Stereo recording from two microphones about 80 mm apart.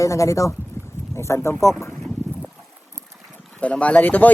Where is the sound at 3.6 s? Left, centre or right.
Centre.